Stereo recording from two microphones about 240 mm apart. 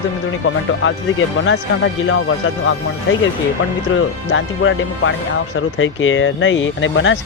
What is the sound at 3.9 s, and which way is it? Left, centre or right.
Speech, left.